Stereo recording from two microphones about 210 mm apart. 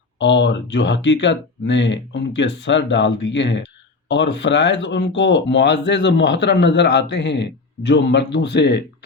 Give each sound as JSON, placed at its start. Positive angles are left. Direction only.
{"t": 0.2, "sound": "speech", "side_deg": 60}